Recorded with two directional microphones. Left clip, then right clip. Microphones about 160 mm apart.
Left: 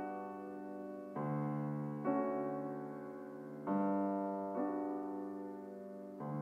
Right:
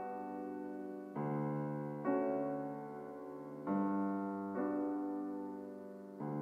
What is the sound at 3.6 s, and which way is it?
Keyboard, 30° right (ahead or behind).